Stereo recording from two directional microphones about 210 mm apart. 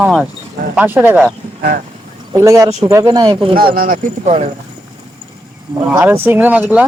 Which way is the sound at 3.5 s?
45° right (ahead or behind).